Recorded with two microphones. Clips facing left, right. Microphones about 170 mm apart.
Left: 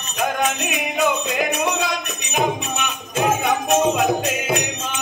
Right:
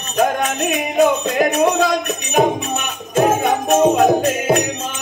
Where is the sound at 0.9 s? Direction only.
45° right (ahead or behind).